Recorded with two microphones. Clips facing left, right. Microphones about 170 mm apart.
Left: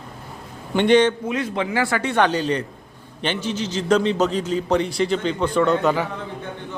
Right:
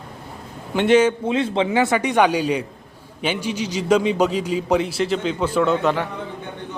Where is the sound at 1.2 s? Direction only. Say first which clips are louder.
Right 4 dB; 25° right (ahead or behind); by 6.1 s centre (ahead or behind).